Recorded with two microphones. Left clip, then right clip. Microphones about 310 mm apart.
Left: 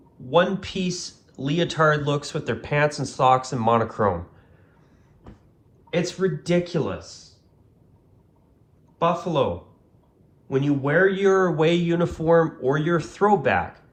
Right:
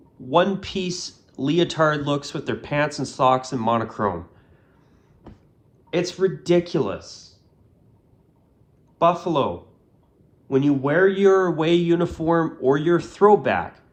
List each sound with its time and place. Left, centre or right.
0.3 s speech: centre
5.9 s speech: centre
9.2 s speech: centre
10.5 s speech: centre